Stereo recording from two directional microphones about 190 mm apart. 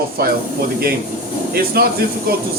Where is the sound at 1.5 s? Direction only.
50° right (ahead or behind).